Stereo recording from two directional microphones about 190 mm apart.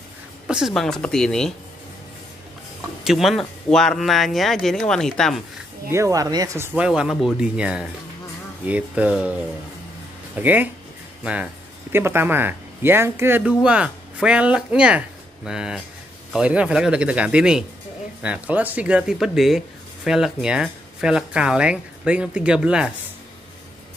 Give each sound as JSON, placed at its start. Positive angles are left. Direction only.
{"t": 0.5, "sound": "speech", "side_deg": -5}
{"t": 3.0, "sound": "speech", "side_deg": 0}
{"t": 5.9, "sound": "speech", "side_deg": -15}
{"t": 6.8, "sound": "speech", "side_deg": -5}
{"t": 11.9, "sound": "speech", "side_deg": -10}